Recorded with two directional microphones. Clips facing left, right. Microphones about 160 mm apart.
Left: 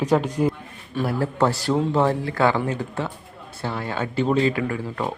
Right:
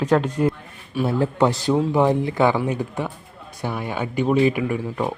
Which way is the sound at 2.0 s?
20° right (ahead or behind).